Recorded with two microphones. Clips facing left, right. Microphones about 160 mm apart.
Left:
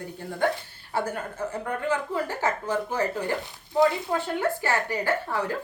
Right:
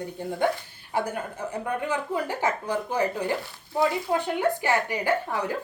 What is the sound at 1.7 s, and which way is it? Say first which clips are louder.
Speech: even; 15° right (ahead or behind).